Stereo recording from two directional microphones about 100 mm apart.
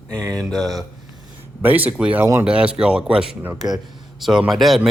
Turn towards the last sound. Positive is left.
turn(degrees=0)  # may be behind; listen again after turning